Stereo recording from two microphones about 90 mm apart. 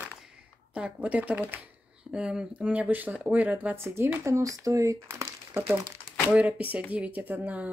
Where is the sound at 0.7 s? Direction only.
15° right (ahead or behind).